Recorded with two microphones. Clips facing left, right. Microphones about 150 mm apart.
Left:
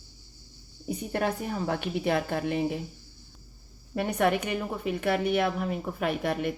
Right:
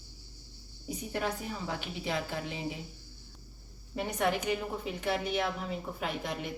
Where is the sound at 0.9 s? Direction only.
55° left (ahead or behind).